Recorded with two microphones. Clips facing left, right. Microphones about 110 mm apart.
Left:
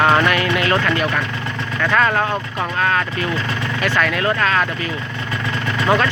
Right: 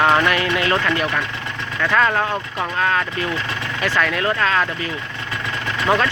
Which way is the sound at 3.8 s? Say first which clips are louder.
Left 1 dB; 20° right (ahead or behind).